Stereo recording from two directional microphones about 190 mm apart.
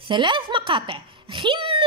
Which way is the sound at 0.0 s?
25° right (ahead or behind).